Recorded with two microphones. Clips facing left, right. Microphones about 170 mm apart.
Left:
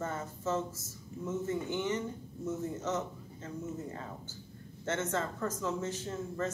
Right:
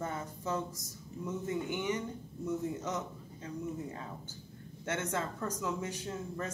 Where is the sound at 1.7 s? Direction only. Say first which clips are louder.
Left 1 dB; 15° right (ahead or behind).